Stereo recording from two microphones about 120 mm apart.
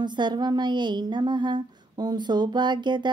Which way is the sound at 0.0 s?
40° right (ahead or behind).